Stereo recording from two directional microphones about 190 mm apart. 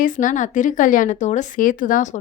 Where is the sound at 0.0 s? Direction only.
45° left (ahead or behind).